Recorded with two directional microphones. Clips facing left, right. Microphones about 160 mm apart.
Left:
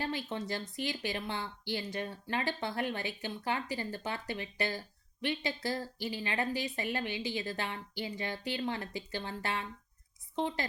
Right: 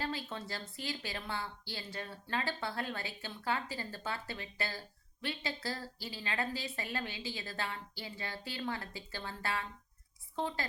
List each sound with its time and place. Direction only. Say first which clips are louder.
0.0 s a woman's voice: left 3 dB; 20° left (ahead or behind)